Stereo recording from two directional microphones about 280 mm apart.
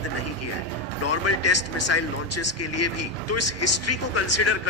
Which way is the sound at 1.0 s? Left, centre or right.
Left.